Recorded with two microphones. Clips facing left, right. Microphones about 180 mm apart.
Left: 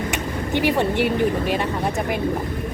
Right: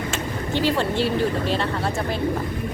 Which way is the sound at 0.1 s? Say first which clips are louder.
Left 2 dB; 15° left (ahead or behind).